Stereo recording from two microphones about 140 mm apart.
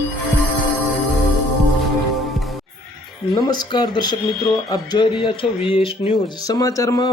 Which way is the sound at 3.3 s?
30° left (ahead or behind).